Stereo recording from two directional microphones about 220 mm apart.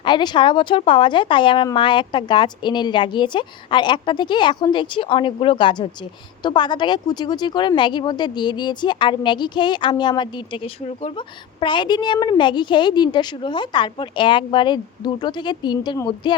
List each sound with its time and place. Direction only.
0.0 s speech: 20° left (ahead or behind)